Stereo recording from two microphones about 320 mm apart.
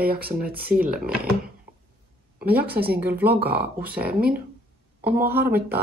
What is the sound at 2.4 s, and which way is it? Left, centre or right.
A woman's voice, right.